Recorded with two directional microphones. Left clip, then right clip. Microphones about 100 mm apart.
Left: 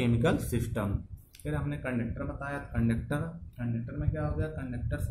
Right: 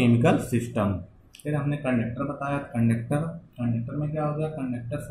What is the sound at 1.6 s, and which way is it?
Speech, centre (ahead or behind).